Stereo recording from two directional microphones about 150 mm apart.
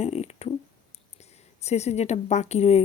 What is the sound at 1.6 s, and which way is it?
Speech, 45° left (ahead or behind).